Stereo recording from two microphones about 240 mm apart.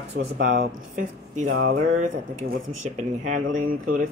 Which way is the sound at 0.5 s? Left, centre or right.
Right.